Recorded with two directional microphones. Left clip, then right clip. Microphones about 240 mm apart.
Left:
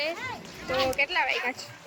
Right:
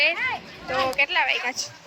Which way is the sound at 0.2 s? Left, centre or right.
Right.